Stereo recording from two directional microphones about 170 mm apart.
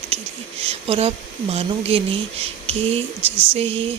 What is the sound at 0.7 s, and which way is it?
Speech, 35° right (ahead or behind).